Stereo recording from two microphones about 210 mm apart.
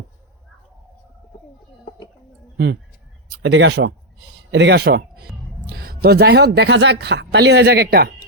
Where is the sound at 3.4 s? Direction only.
60° right (ahead or behind).